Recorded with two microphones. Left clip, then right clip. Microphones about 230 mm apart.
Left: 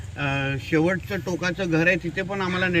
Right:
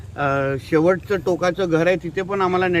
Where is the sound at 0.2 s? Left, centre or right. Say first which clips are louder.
Right 6 dB; right.